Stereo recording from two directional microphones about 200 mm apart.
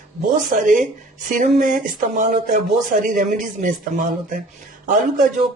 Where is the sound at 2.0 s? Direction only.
40° right (ahead or behind).